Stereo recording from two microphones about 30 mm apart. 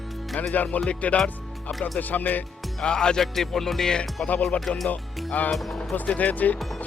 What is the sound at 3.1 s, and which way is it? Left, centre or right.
Music, centre.